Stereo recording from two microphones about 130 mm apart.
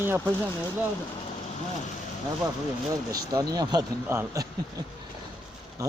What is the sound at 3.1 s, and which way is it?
Speech, 30° right (ahead or behind).